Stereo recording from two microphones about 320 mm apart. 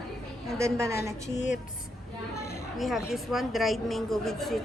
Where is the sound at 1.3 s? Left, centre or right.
Left.